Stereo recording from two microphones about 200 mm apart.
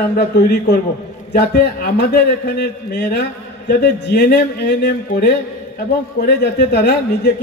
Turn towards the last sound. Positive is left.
turn(degrees=55)  # may be behind; listen again after turning